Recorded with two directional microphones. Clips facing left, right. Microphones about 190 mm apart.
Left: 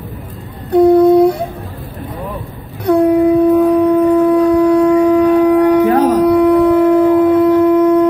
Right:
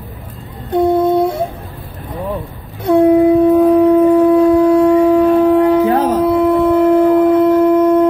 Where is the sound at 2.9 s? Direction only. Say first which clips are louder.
Right 1 dB; centre (ahead or behind).